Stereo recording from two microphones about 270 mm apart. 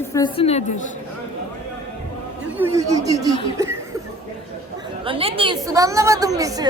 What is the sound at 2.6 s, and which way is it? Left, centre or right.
Speech, centre.